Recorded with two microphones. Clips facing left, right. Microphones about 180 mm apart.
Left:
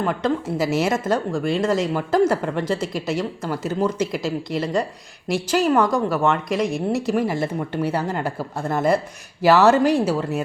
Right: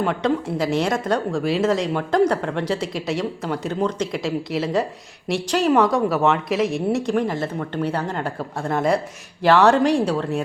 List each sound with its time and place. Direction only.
0.0 s speech: centre (ahead or behind)